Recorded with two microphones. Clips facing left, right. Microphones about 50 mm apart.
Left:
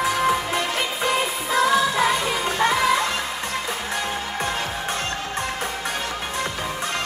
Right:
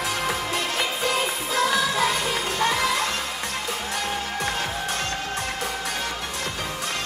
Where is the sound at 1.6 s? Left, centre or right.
Left.